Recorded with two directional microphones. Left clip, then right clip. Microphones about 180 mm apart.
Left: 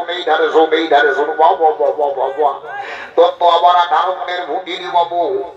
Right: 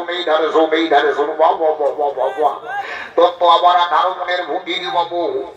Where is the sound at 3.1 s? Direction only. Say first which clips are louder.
Left 1 dB; 20° left (ahead or behind).